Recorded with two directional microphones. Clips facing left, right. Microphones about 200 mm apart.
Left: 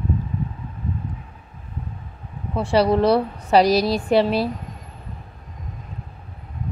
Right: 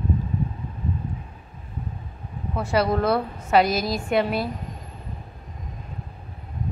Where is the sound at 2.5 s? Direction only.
30° left (ahead or behind).